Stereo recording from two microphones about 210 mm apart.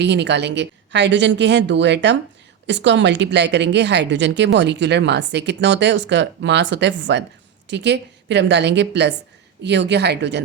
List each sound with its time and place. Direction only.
0.0 s a woman's voice: 55° right (ahead or behind)